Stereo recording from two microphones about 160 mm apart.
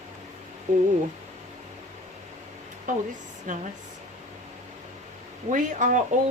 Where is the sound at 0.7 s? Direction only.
50° right (ahead or behind).